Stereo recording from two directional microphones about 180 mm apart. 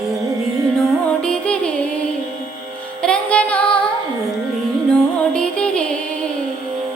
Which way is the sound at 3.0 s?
5° left (ahead or behind).